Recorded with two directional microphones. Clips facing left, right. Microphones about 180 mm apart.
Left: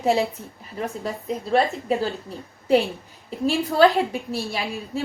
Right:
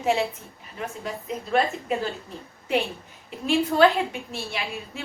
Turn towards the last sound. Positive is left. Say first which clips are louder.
# left 5 dB
turn(degrees=35)  # may be behind; listen again after turning